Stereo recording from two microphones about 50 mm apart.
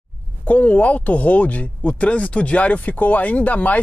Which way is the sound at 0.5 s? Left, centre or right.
Left.